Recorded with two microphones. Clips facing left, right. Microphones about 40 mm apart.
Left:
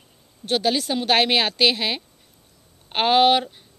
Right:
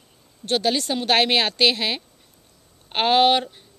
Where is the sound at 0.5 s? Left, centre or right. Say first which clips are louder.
Even; centre.